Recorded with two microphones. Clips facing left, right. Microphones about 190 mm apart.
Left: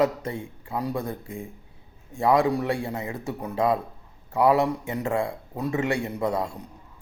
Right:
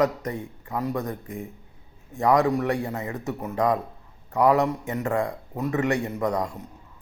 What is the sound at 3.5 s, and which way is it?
A man's voice, 25° left (ahead or behind).